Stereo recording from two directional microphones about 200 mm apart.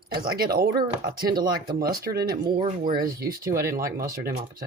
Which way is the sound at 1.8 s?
50° right (ahead or behind).